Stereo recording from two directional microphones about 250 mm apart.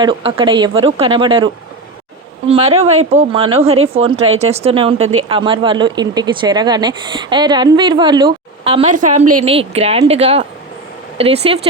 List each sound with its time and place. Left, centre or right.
0.0 s speech: centre
2.5 s speech: right